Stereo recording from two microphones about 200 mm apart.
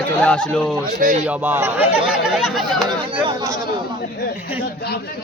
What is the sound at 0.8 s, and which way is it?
Speech, 40° right (ahead or behind).